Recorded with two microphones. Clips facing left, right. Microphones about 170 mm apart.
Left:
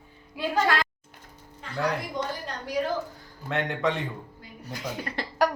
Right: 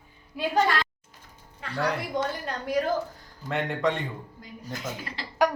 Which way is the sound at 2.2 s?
60° right (ahead or behind).